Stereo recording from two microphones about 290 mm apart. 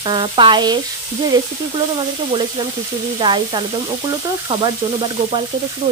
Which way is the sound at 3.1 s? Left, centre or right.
Centre.